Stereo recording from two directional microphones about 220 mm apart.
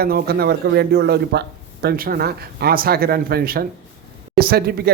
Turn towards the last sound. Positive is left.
turn(degrees=-45)  # may be behind; listen again after turning